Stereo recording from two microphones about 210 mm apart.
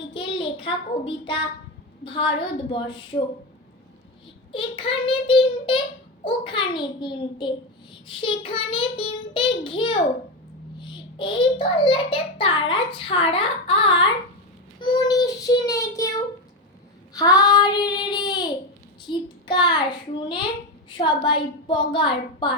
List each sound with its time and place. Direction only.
0.1 s child singing: 25° left (ahead or behind)
2.0 s a child's voice: 25° left (ahead or behind)
4.5 s a child's voice: 25° left (ahead or behind)
14.8 s child singing: 20° left (ahead or behind)
17.2 s a child's voice: 20° left (ahead or behind)